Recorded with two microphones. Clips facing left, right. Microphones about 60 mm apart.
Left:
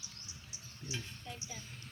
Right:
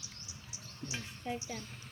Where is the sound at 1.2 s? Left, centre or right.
Right.